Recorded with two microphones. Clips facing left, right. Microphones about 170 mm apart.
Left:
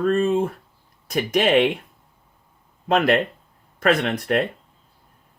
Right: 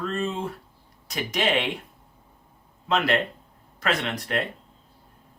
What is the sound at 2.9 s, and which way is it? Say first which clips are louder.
Speech: left 5 dB; 55° left (ahead or behind).